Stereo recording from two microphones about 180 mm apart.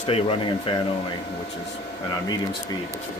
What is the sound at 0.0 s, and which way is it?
Speech, 30° left (ahead or behind).